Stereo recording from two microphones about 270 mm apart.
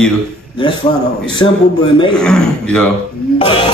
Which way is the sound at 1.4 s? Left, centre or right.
Centre.